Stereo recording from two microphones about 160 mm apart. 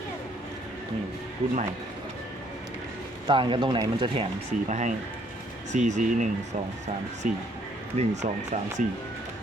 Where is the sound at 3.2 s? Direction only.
30° right (ahead or behind).